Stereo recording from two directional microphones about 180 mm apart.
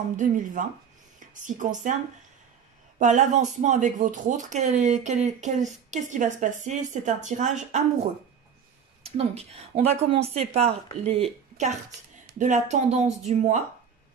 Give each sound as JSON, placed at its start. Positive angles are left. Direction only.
{"t": 0.1, "sound": "speech", "side_deg": -45}
{"t": 3.0, "sound": "speech", "side_deg": -45}
{"t": 9.0, "sound": "speech", "side_deg": -35}